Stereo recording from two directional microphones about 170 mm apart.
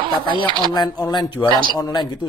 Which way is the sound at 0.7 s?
25° left (ahead or behind).